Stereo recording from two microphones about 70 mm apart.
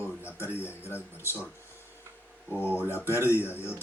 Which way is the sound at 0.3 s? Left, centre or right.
Left.